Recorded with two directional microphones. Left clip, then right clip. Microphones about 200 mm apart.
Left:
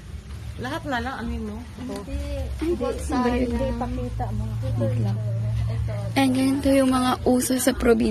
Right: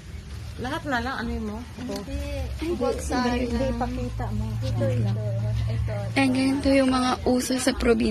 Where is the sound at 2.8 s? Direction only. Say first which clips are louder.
Right 3 dB; centre (ahead or behind).